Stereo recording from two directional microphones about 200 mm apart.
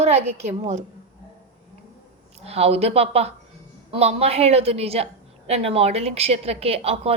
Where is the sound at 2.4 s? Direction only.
30° right (ahead or behind).